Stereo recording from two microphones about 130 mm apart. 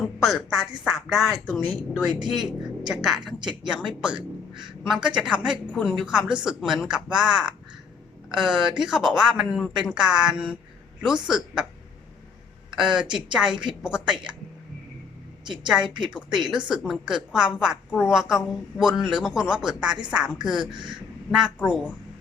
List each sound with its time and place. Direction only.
0.2 s speech: centre (ahead or behind)
2.1 s speech: 35° right (ahead or behind)
2.8 s a woman's voice: 5° right (ahead or behind)
12.7 s a woman's voice: 5° right (ahead or behind)
15.6 s a woman's voice: 5° right (ahead or behind)